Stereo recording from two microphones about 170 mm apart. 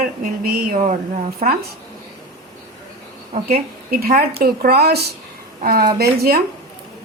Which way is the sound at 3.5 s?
60° right (ahead or behind).